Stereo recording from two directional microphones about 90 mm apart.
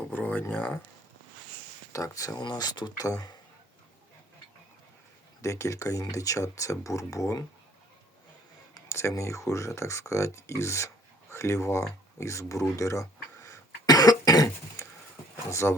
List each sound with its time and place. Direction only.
0.1 s speech: 20° left (ahead or behind)
1.9 s speech: 40° left (ahead or behind)
2.4 s speech: 50° left (ahead or behind)
3.1 s speech: 45° left (ahead or behind)
5.4 s speech: 35° left (ahead or behind)
8.7 s speech: 30° left (ahead or behind)
12.2 s throat clearing: 35° left (ahead or behind)
15.4 s speech: 35° left (ahead or behind)